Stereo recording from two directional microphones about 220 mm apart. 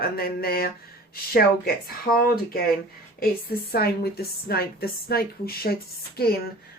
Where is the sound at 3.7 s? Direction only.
45° left (ahead or behind).